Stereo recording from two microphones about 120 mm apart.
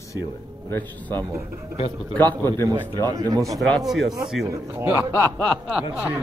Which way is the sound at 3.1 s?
30° right (ahead or behind).